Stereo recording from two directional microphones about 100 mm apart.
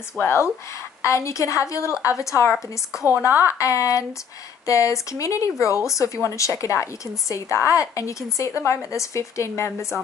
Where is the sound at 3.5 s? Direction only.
35° left (ahead or behind).